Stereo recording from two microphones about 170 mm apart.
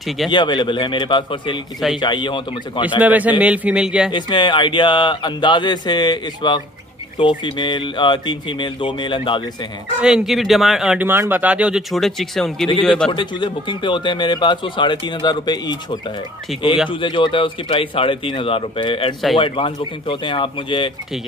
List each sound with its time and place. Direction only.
0.3 s speech: 25° left (ahead or behind)
3.0 s a man's voice: 10° right (ahead or behind)
4.1 s speech: 25° left (ahead or behind)
10.0 s speech: centre (ahead or behind)
13.1 s a man's voice: 30° left (ahead or behind)